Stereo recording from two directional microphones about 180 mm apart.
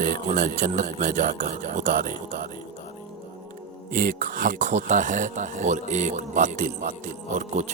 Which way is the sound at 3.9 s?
50° right (ahead or behind).